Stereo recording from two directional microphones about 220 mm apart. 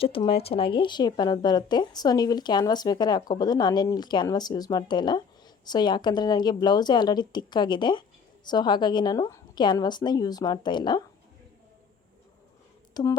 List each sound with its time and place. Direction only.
0.0 s speech: 25° left (ahead or behind)
12.9 s speech: 15° left (ahead or behind)